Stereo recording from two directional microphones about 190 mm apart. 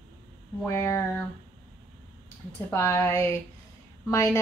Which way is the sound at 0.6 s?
15° left (ahead or behind).